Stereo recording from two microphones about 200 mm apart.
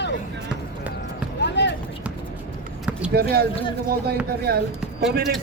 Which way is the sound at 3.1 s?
50° right (ahead or behind).